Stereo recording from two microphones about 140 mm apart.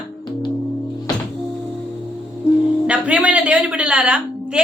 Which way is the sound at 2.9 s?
10° right (ahead or behind).